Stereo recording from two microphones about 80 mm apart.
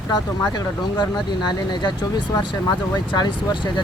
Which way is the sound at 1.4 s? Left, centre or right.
Left.